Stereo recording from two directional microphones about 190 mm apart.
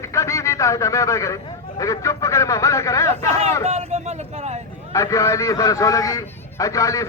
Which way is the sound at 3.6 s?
35° right (ahead or behind).